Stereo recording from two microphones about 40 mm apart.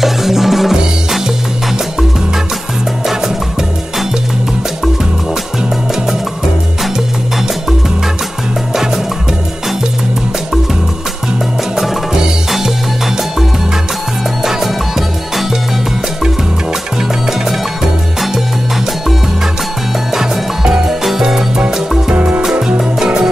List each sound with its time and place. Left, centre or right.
0.0 s music: centre
11.7 s music: centre
14.4 s music: centre
20.2 s music: centre
22.1 s music: right
22.4 s music: centre